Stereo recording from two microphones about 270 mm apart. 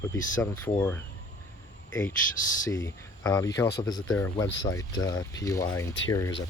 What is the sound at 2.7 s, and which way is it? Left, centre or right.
Speech, centre.